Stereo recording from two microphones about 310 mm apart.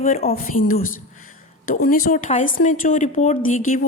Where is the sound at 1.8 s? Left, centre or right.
Left.